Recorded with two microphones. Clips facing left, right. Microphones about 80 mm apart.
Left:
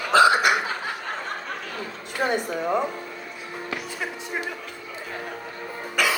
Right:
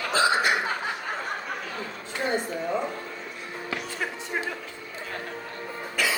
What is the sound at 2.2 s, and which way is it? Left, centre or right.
Speech, left.